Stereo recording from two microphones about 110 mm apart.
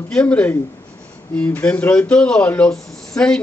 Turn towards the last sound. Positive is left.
turn(degrees=5)  # may be behind; listen again after turning